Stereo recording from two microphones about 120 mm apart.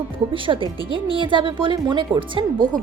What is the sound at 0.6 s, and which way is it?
Speech, 30° left (ahead or behind).